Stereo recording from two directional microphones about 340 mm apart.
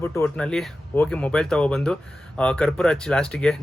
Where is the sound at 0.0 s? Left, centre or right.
Centre.